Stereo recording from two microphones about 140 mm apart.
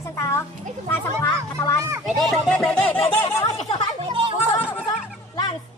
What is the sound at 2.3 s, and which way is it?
Speech, 5° left (ahead or behind).